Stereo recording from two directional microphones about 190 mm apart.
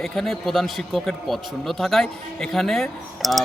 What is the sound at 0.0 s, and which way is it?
Speech, centre (ahead or behind).